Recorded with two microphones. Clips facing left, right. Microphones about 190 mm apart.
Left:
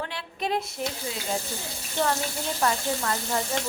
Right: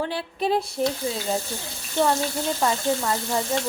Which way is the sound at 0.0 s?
35° right (ahead or behind).